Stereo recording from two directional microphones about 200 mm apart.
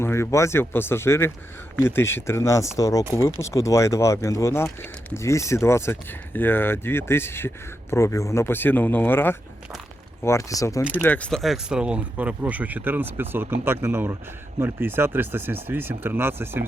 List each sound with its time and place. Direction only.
0.0 s speech: 15° left (ahead or behind); by 16.6 s 10° right (ahead or behind)